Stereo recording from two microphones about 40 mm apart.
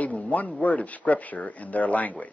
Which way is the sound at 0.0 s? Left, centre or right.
Left.